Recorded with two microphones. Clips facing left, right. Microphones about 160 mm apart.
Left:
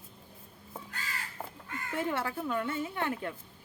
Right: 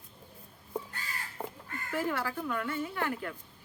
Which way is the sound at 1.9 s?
25° left (ahead or behind).